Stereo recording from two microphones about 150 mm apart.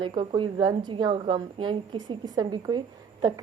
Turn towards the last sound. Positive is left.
turn(degrees=-25)  # may be behind; listen again after turning